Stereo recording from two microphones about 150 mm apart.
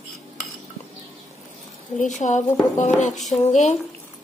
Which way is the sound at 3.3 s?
20° left (ahead or behind).